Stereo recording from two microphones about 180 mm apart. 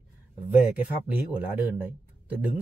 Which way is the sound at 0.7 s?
10° right (ahead or behind).